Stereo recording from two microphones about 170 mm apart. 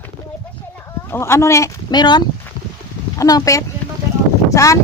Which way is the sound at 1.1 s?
15° left (ahead or behind).